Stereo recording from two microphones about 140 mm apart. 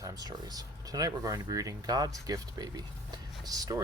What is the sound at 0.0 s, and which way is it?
Speech, 25° right (ahead or behind).